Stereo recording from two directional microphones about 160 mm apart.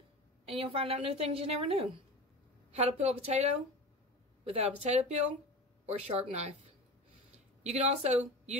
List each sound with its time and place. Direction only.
0.5 s a woman's voice: 35° right (ahead or behind)
7.6 s speech: 45° right (ahead or behind)